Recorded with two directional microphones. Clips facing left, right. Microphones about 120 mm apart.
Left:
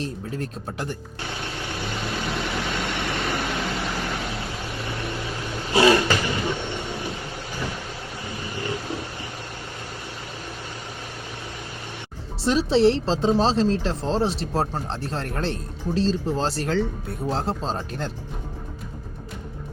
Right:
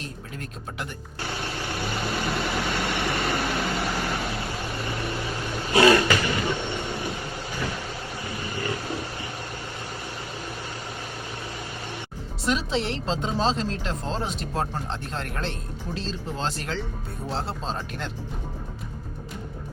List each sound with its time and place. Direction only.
0.0 s speech: 35° left (ahead or behind)
1.2 s vehicle: 5° right (ahead or behind)
5.7 s vehicle: 25° left (ahead or behind)
6.3 s train: centre (ahead or behind)
8.7 s a sound: 5° left (ahead or behind)
12.4 s speech: 35° left (ahead or behind)